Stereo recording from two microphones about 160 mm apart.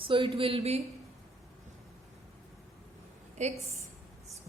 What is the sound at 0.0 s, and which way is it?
Speech, 35° right (ahead or behind).